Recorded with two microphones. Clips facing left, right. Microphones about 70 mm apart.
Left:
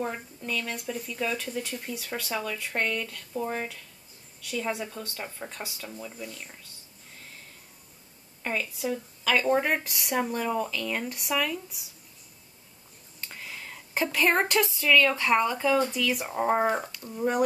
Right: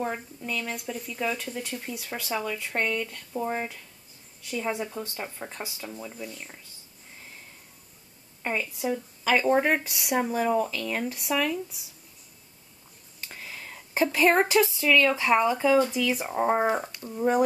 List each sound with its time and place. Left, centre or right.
0.0 s speech: centre
8.4 s speech: centre
13.2 s speech: centre